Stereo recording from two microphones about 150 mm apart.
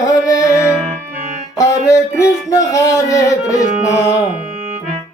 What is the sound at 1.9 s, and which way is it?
Speech, 20° left (ahead or behind).